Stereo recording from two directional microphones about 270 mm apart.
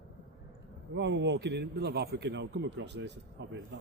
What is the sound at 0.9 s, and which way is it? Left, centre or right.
A man's voice, right.